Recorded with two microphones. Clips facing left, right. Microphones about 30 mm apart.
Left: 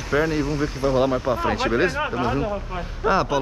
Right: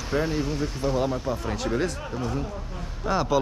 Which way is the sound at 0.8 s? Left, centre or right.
Left.